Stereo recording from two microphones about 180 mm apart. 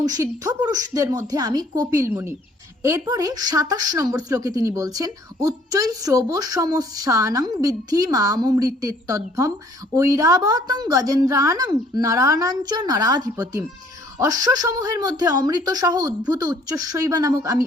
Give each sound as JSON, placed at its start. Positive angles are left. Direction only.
{"t": 0.0, "sound": "speech", "side_deg": -20}